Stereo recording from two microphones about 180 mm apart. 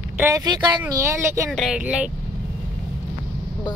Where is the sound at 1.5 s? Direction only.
Centre (ahead or behind).